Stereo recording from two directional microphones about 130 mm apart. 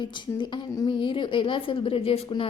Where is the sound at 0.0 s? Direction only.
35° left (ahead or behind).